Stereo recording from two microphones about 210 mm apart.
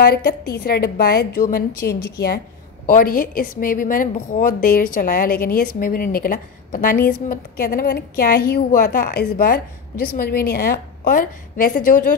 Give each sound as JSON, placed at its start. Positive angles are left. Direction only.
{"t": 0.0, "sound": "a woman's voice", "side_deg": 45}